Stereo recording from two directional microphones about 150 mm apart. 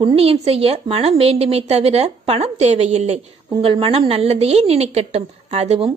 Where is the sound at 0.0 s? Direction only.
40° right (ahead or behind).